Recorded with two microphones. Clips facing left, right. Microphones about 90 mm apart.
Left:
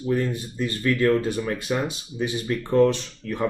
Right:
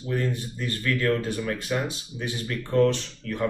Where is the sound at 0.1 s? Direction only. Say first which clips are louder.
Left 3 dB; 15° left (ahead or behind).